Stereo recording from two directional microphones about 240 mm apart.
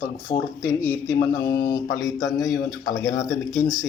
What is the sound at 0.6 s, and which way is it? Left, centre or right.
Speech, centre.